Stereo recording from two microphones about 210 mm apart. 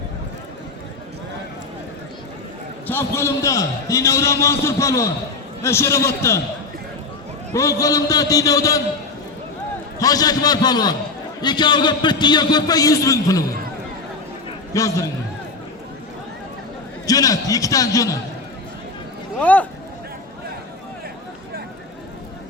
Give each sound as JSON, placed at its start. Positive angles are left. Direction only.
{"t": 2.8, "sound": "a man's voice", "side_deg": 10}
{"t": 7.5, "sound": "a man's voice", "side_deg": 15}
{"t": 10.0, "sound": "a man's voice", "side_deg": 15}
{"t": 14.7, "sound": "a man's voice", "side_deg": 15}
{"t": 17.1, "sound": "a man's voice", "side_deg": 15}
{"t": 19.4, "sound": "a man's voice", "side_deg": 5}